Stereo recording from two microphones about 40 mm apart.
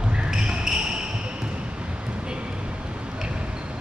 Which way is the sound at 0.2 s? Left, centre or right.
Centre.